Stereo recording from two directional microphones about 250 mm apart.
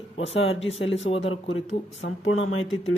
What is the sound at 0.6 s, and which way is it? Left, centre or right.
Speech, left.